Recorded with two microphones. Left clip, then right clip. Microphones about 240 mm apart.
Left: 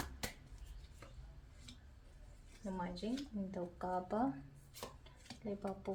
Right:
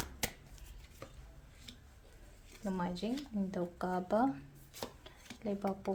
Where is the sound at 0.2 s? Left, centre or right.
Right.